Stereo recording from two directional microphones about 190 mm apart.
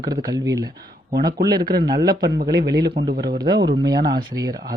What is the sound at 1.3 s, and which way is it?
Speech, 55° right (ahead or behind).